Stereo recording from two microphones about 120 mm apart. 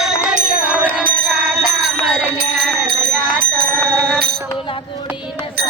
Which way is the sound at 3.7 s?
5° left (ahead or behind).